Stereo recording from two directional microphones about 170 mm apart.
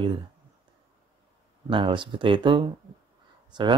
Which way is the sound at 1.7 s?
30° right (ahead or behind).